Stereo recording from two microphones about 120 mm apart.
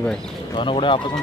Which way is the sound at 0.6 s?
45° left (ahead or behind).